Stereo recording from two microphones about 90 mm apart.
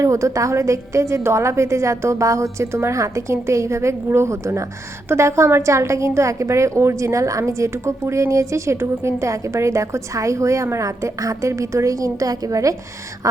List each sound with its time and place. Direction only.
0.0 s a woman's voice: 35° right (ahead or behind)